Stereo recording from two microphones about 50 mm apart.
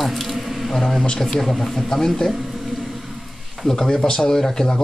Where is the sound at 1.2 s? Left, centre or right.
Centre.